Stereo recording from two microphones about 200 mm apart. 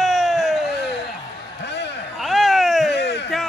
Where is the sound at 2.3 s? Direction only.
Centre (ahead or behind).